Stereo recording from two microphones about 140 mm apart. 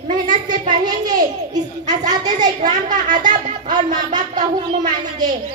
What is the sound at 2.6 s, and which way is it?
Speech, 70° right (ahead or behind).